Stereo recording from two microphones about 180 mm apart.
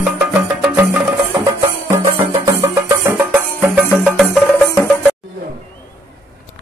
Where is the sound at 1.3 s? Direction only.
20° right (ahead or behind); by 4.9 s centre (ahead or behind).